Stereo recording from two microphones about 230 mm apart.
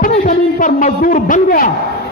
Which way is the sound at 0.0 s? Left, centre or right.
Left.